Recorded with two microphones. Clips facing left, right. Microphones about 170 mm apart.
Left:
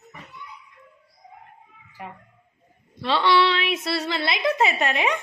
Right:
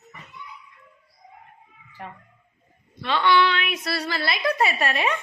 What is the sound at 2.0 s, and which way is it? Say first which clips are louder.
Speech: left 1 dB; 5° left (ahead or behind).